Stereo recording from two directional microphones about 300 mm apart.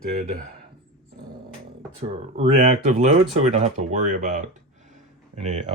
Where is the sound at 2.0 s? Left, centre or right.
Centre.